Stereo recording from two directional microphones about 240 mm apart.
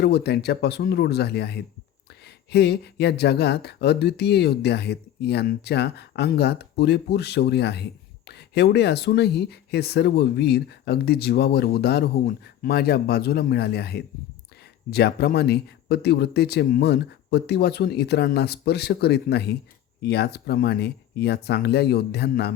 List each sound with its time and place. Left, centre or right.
0.0 s speech: left